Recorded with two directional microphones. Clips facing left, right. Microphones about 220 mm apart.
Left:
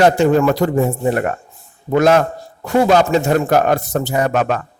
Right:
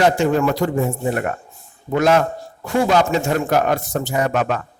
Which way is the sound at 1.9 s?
40° left (ahead or behind).